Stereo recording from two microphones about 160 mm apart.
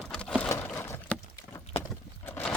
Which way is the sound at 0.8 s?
15° left (ahead or behind).